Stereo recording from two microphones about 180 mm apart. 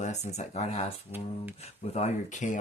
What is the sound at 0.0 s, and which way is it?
Speech, 40° left (ahead or behind).